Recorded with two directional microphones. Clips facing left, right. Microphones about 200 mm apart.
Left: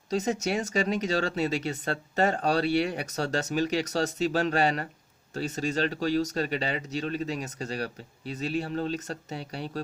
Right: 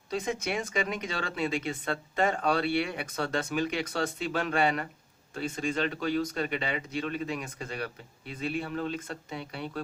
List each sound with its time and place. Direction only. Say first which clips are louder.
0.1 s speech: left 4 dB; 40° left (ahead or behind)